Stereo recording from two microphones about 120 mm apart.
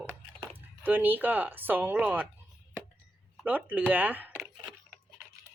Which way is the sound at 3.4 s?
15° right (ahead or behind).